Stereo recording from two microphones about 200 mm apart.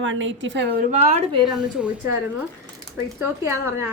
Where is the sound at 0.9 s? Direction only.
30° right (ahead or behind).